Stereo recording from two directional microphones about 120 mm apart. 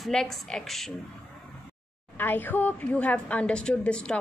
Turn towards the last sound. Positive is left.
turn(degrees=10)  # may be behind; listen again after turning